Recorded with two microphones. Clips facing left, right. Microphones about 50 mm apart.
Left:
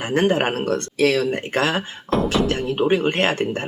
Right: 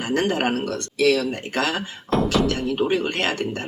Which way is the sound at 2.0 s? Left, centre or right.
Centre.